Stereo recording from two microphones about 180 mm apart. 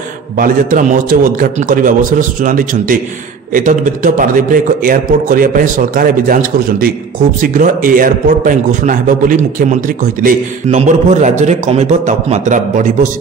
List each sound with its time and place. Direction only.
0.4 s a man's voice: 50° right (ahead or behind)